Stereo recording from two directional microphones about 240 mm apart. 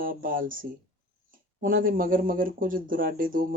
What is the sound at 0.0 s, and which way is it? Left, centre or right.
Speech, right.